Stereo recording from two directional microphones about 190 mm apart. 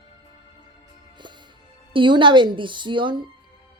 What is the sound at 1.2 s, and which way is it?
Music, 25° right (ahead or behind).